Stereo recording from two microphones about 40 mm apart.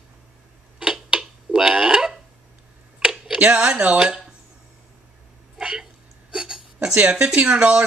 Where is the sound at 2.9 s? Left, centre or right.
Right.